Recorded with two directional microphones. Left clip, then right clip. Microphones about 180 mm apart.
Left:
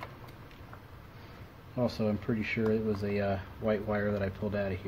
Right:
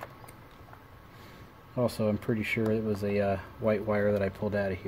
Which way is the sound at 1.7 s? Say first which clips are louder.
Right 3 dB; 45° right (ahead or behind).